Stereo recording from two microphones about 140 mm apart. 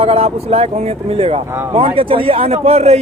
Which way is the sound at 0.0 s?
45° right (ahead or behind).